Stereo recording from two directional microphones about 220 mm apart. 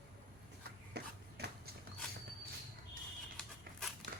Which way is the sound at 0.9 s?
50° right (ahead or behind).